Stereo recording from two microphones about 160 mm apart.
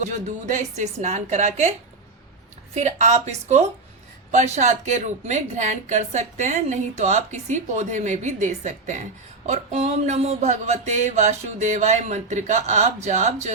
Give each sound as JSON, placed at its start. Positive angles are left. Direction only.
{"t": 0.0, "sound": "a woman's voice", "side_deg": -50}
{"t": 2.7, "sound": "a woman's voice", "side_deg": -45}